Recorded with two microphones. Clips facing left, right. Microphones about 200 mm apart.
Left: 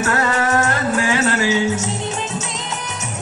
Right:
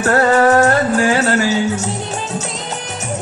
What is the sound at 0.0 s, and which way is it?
Music, 35° right (ahead or behind).